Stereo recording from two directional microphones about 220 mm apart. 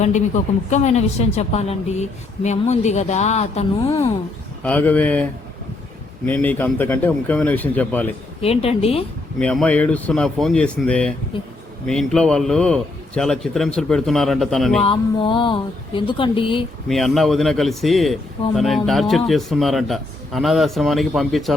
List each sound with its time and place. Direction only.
0.7 s a woman's voice: 30° left (ahead or behind)
4.6 s a man's voice: 5° left (ahead or behind)
8.4 s speech: 25° left (ahead or behind)
9.4 s a man's voice: 5° left (ahead or behind)
14.8 s speech: 25° left (ahead or behind)
16.9 s a man's voice: centre (ahead or behind)